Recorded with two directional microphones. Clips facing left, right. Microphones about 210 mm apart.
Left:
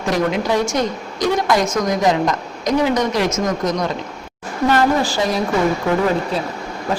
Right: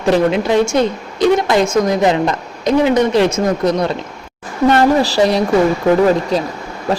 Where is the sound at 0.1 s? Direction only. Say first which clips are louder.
Right 5 dB; 25° right (ahead or behind).